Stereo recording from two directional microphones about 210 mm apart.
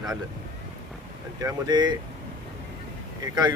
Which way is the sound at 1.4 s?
20° right (ahead or behind).